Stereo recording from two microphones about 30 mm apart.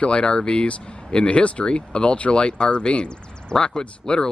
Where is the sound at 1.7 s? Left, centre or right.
Left.